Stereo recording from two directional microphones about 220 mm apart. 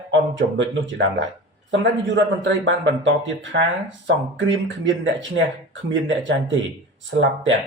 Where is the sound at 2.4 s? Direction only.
55° right (ahead or behind).